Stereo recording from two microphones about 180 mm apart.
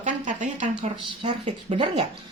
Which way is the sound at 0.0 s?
45° right (ahead or behind).